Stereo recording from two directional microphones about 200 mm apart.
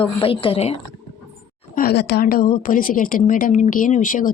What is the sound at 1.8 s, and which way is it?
A woman's voice, 55° left (ahead or behind).